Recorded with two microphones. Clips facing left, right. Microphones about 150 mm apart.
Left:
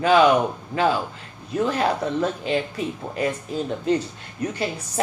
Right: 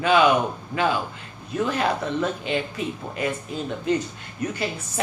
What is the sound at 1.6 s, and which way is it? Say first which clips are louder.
A woman's voice: left 2 dB; 35° left (ahead or behind).